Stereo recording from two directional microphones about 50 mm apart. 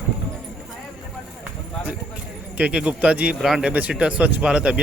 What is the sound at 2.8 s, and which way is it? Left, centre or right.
Speech, right.